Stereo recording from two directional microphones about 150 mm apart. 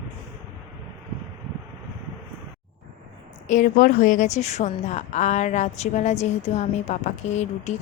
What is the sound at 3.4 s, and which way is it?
A woman's voice, 55° left (ahead or behind).